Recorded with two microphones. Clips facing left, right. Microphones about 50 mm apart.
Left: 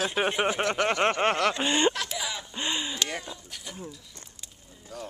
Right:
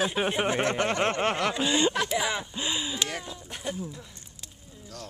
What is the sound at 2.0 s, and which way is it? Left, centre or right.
Speech, centre.